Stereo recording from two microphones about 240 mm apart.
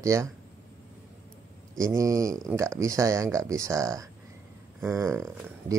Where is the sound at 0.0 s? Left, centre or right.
Centre.